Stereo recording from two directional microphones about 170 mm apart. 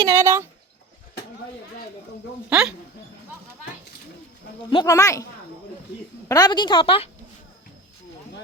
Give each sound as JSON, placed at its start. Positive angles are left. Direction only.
{"t": 0.0, "sound": "speech", "side_deg": -15}
{"t": 2.5, "sound": "speech", "side_deg": -5}
{"t": 4.7, "sound": "a woman's voice", "side_deg": 25}